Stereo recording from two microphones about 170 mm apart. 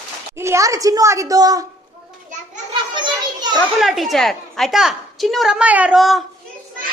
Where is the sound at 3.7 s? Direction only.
Centre (ahead or behind).